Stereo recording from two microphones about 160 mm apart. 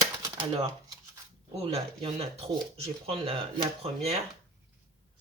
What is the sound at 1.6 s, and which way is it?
Speech, 35° right (ahead or behind).